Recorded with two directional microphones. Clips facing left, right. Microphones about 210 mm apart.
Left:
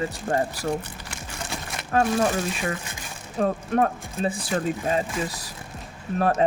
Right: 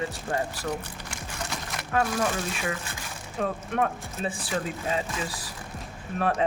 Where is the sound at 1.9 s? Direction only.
30° left (ahead or behind).